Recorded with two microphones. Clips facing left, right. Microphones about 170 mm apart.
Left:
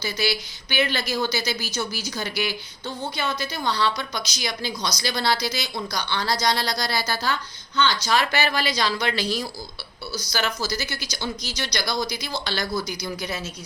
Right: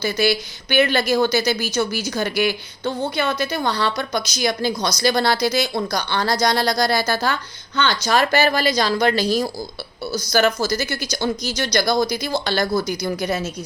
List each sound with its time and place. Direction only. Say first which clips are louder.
0.0 s a woman's voice: right 7 dB; 50° right (ahead or behind)